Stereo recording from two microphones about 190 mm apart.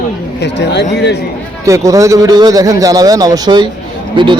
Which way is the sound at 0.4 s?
65° left (ahead or behind).